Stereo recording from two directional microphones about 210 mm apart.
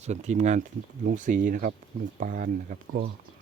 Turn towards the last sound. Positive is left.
turn(degrees=-40)  # may be behind; listen again after turning